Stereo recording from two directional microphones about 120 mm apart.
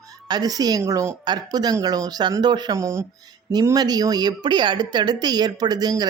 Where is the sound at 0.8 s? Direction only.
25° right (ahead or behind).